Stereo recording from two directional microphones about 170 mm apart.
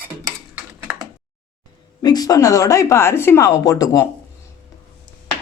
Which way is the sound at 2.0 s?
20° left (ahead or behind).